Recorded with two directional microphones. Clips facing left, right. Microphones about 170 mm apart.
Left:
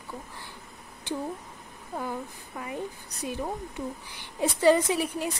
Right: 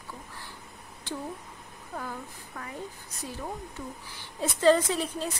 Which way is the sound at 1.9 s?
15° left (ahead or behind).